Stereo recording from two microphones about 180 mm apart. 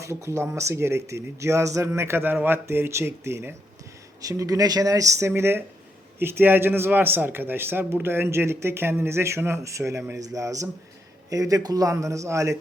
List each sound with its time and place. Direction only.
0.0 s speech: 15° right (ahead or behind)